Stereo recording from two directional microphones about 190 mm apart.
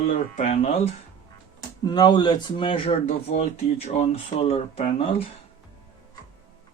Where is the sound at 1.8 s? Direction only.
20° left (ahead or behind).